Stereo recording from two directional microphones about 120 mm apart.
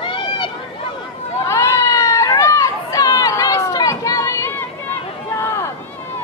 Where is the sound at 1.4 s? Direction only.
25° left (ahead or behind).